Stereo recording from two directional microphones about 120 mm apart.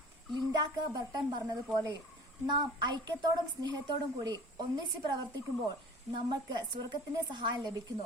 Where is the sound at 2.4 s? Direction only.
35° right (ahead or behind).